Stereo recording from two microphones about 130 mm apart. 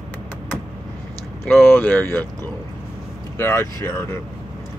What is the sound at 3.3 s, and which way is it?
Speech, 20° left (ahead or behind).